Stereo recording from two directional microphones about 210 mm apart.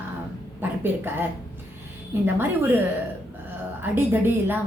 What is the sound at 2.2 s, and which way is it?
Speech, 10° right (ahead or behind).